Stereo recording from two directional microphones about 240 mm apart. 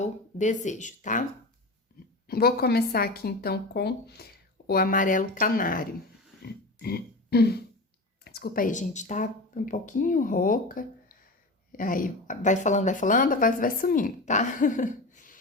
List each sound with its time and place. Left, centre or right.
0.0 s speech: left
2.2 s a woman's voice: left
6.4 s a sound: left
8.2 s a woman's voice: left